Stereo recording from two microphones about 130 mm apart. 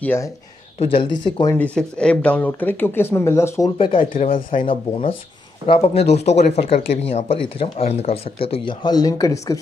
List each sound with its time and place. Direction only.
0.0 s speech: 20° left (ahead or behind)
0.7 s speech: 45° left (ahead or behind)
1.8 s speech: 5° left (ahead or behind)
3.7 s speech: 40° left (ahead or behind)
4.1 s speech: 90° left
5.7 s speech: 45° left (ahead or behind)
8.8 s speech: 30° left (ahead or behind)